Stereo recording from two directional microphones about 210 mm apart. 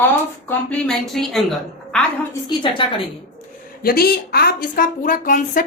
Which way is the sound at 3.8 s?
45° left (ahead or behind).